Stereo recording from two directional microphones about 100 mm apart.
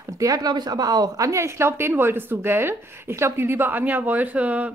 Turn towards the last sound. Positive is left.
turn(degrees=-15)  # may be behind; listen again after turning